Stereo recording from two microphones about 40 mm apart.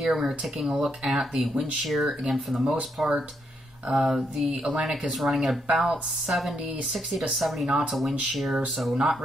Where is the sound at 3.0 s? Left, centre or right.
Right.